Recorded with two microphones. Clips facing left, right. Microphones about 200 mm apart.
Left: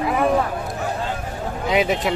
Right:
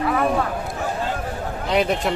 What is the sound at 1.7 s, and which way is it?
Speech, centre (ahead or behind).